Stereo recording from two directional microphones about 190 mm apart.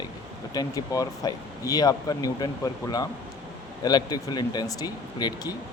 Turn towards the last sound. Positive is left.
turn(degrees=20)  # may be behind; listen again after turning